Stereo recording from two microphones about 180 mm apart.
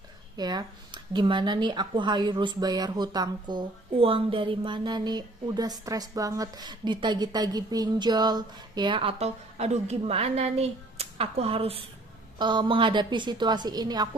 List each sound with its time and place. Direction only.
0.3 s speech: 25° right (ahead or behind)